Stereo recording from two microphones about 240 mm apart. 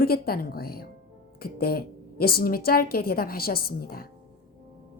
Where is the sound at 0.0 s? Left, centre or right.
Left.